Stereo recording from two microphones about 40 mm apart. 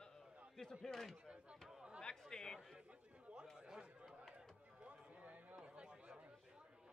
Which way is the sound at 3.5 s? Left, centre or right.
Centre.